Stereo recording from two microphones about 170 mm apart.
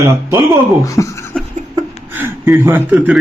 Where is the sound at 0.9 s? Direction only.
20° left (ahead or behind).